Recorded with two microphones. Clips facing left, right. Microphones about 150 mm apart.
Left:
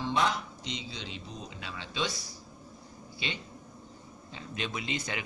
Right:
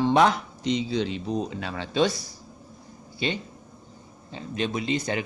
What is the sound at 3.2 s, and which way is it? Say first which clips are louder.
A man's voice: right 10 dB; 45° right (ahead or behind).